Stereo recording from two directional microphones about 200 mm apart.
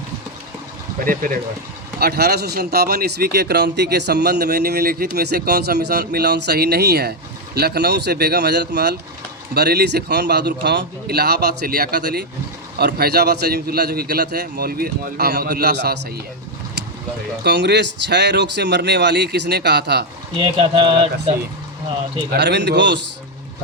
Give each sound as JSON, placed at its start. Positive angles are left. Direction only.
{"t": 1.0, "sound": "speech", "side_deg": -45}
{"t": 17.4, "sound": "speech", "side_deg": -60}
{"t": 20.3, "sound": "speech", "side_deg": -25}
{"t": 22.3, "sound": "speech", "side_deg": -60}